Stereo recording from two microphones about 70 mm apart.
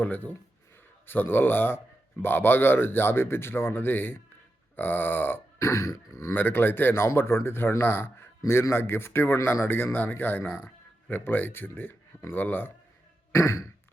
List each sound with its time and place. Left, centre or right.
0.0 s speech: left
5.5 s throat clearing: left
6.3 s speech: left
13.3 s throat clearing: left